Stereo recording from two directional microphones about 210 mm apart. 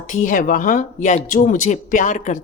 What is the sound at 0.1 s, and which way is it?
A woman's voice, 35° left (ahead or behind).